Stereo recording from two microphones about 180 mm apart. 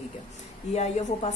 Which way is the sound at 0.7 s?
35° left (ahead or behind).